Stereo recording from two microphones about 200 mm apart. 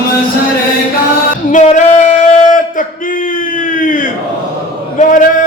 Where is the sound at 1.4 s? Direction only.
40° left (ahead or behind).